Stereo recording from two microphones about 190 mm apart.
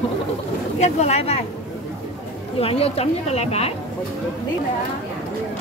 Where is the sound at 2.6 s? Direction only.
30° left (ahead or behind).